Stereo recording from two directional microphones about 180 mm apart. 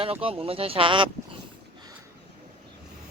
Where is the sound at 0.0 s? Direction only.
30° right (ahead or behind).